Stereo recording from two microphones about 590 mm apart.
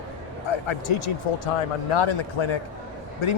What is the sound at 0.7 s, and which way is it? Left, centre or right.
A man's voice, left.